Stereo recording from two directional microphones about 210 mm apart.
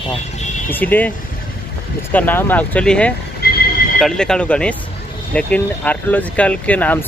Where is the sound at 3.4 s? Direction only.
50° left (ahead or behind).